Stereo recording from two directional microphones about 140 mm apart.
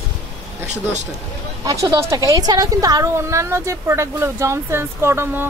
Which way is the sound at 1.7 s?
20° right (ahead or behind).